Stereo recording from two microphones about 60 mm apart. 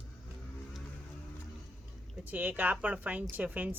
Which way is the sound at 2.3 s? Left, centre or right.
Right.